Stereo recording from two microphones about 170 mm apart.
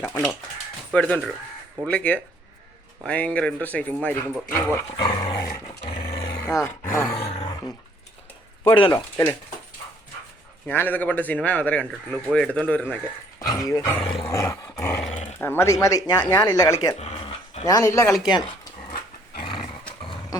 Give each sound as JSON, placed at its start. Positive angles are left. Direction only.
{"t": 0.9, "sound": "speech", "side_deg": 5}
{"t": 4.9, "sound": "roar", "side_deg": 25}
{"t": 7.3, "sound": "roar", "side_deg": 30}
{"t": 8.7, "sound": "speech", "side_deg": 30}
{"t": 10.7, "sound": "speech", "side_deg": 10}
{"t": 13.4, "sound": "dog", "side_deg": 20}
{"t": 15.1, "sound": "roaring cats", "side_deg": 40}
{"t": 15.4, "sound": "dog", "side_deg": 15}
{"t": 17.0, "sound": "dog", "side_deg": 35}
{"t": 17.7, "sound": "dog", "side_deg": 20}
{"t": 18.1, "sound": "speech", "side_deg": -5}
{"t": 19.4, "sound": "dog", "side_deg": 30}